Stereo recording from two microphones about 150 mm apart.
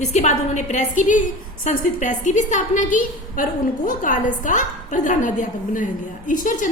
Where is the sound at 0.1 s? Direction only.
50° left (ahead or behind).